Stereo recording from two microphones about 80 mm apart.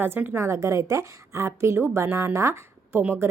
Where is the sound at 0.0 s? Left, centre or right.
Right.